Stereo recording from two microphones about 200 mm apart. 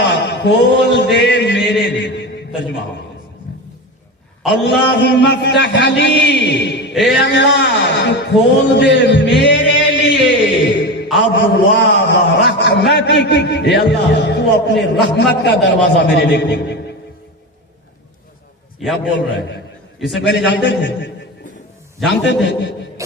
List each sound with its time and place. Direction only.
0.0 s a sound: 60° left (ahead or behind)
4.5 s a man's voice: 60° left (ahead or behind)
6.9 s music: centre (ahead or behind)
7.2 s speech: 60° left (ahead or behind)
10.2 s a sound: 65° left (ahead or behind)
11.3 s a man's voice: 60° left (ahead or behind)
19.0 s a man's voice: 60° left (ahead or behind)
20.0 s music: centre (ahead or behind)
20.2 s a man's voice: 60° left (ahead or behind)
22.1 s a man's voice: 60° left (ahead or behind)
23.0 s music: 15° right (ahead or behind)